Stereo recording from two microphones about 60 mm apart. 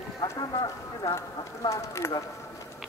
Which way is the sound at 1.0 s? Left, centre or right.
Left.